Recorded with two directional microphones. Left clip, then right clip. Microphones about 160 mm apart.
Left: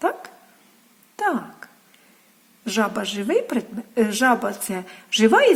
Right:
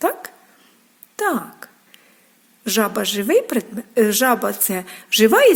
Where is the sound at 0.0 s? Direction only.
25° right (ahead or behind).